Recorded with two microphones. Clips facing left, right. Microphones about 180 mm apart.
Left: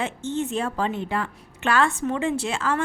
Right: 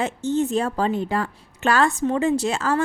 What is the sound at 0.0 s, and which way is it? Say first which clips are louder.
A woman's voice: right 5 dB; 40° right (ahead or behind).